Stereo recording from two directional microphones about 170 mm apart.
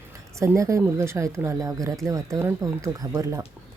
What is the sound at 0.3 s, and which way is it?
Speech, 15° right (ahead or behind).